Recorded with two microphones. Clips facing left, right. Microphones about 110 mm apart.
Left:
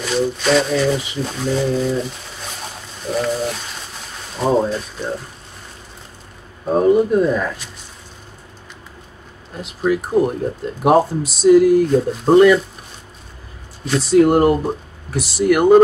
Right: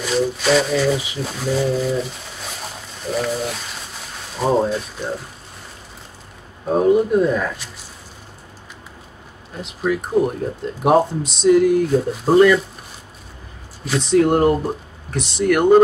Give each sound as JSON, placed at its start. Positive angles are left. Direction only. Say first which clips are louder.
{"t": 0.0, "sound": "speech", "louder": "left 1 dB", "side_deg": 0}
{"t": 3.1, "sound": "a sound", "louder": "left 2 dB", "side_deg": 0}
{"t": 4.4, "sound": "speech", "louder": "left 1 dB", "side_deg": 0}
{"t": 6.7, "sound": "speech", "louder": "left 1 dB", "side_deg": 0}
{"t": 9.6, "sound": "speech", "louder": "left 3 dB", "side_deg": 0}
{"t": 13.8, "sound": "speech", "louder": "left 3 dB", "side_deg": 5}